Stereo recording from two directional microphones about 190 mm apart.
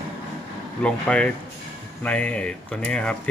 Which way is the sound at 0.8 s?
5° left (ahead or behind).